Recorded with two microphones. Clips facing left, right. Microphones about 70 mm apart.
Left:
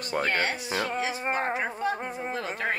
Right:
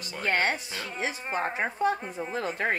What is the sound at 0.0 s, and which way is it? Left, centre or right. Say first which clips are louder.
Speech: left 6 dB; left.